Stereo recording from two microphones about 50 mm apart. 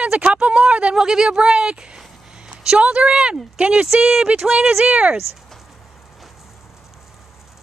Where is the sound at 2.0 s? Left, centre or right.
Centre.